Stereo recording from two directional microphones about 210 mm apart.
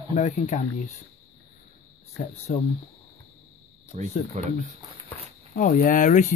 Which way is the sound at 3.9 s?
35° right (ahead or behind).